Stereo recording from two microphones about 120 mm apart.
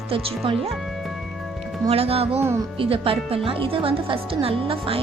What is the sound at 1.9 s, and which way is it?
Speech, 55° right (ahead or behind).